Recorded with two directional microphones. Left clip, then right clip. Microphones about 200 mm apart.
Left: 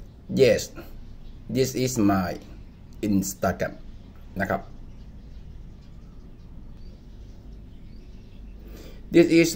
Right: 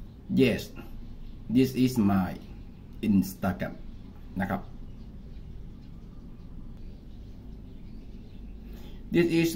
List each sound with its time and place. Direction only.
0.3 s speech: 30° left (ahead or behind)
9.1 s speech: 30° left (ahead or behind)